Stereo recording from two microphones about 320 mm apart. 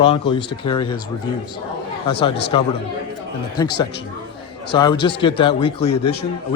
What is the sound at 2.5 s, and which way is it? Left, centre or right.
Speech, centre.